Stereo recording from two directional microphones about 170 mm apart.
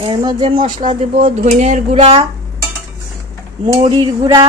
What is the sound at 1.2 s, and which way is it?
Speech, 45° right (ahead or behind).